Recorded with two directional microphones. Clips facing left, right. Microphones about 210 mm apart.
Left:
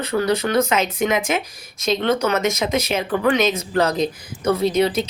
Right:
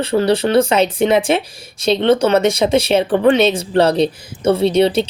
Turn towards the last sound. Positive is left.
turn(degrees=-30)  # may be behind; listen again after turning